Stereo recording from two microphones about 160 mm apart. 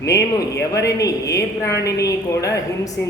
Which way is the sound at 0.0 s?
20° left (ahead or behind).